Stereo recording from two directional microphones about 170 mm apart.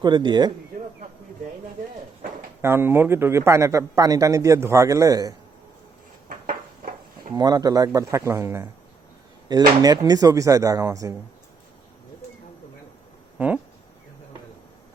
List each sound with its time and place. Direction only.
0.0 s speech: 25° right (ahead or behind)
2.6 s a man's voice: 15° right (ahead or behind)
6.2 s a sound: 55° right (ahead or behind)
7.3 s speech: 25° right (ahead or behind)